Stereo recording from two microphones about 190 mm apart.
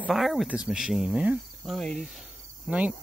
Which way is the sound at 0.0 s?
Centre (ahead or behind).